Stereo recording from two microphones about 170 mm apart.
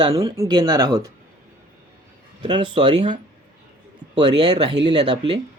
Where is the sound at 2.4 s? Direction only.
30° right (ahead or behind).